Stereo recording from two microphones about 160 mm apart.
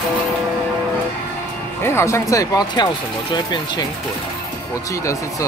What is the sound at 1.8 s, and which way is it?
Speech, 15° left (ahead or behind).